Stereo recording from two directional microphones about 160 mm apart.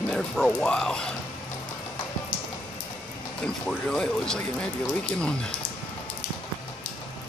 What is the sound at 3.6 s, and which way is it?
Speech, 5° left (ahead or behind).